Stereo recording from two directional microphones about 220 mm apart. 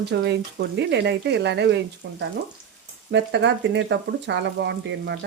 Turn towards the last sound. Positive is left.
turn(degrees=-50)  # may be behind; listen again after turning